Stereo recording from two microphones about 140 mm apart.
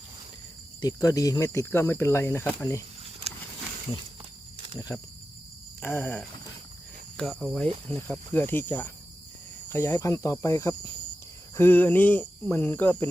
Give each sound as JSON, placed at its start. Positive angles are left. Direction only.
{"t": 0.8, "sound": "speech", "side_deg": 25}
{"t": 3.0, "sound": "a sound", "side_deg": -50}
{"t": 4.9, "sound": "speech", "side_deg": 20}
{"t": 7.2, "sound": "cricket", "side_deg": 0}
{"t": 7.9, "sound": "speech", "side_deg": 10}